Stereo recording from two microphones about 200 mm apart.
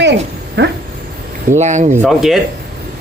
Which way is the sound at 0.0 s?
60° right (ahead or behind).